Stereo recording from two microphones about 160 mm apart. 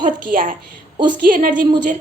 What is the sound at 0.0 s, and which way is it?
A woman's voice, 60° right (ahead or behind).